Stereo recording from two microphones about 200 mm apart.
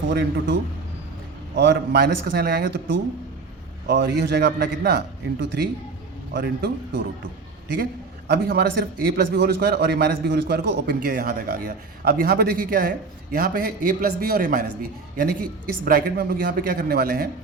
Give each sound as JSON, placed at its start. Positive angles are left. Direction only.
{"t": 0.1, "sound": "speech", "side_deg": -55}
{"t": 1.5, "sound": "a man's voice", "side_deg": -55}
{"t": 8.3, "sound": "a man's voice", "side_deg": -50}